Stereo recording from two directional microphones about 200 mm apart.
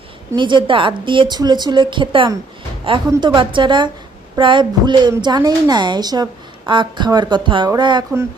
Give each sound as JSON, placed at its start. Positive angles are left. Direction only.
{"t": 0.3, "sound": "a woman's voice", "side_deg": -25}